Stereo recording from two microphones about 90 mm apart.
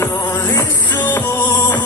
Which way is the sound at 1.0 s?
20° left (ahead or behind).